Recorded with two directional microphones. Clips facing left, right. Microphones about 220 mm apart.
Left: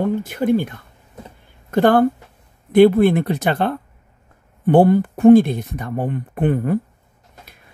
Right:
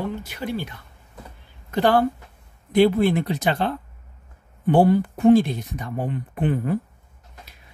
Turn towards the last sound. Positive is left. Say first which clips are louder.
# left 4 dB
turn(degrees=55)  # may be behind; listen again after turning